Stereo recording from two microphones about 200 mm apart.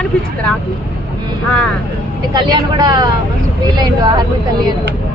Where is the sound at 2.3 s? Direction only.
20° right (ahead or behind).